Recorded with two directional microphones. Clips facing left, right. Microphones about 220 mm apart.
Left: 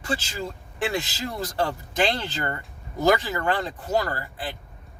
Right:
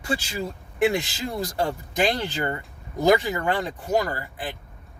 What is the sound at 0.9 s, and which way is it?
Speech, 15° right (ahead or behind).